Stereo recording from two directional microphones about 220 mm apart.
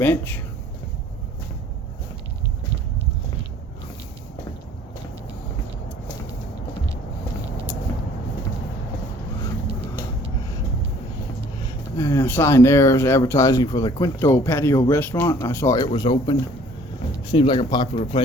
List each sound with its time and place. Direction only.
0.0 s speech: 10° left (ahead or behind)
11.9 s speech: 15° left (ahead or behind)